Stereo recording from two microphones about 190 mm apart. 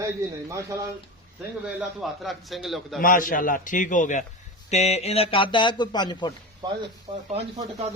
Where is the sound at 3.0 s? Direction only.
45° left (ahead or behind); by 6.3 s 20° left (ahead or behind).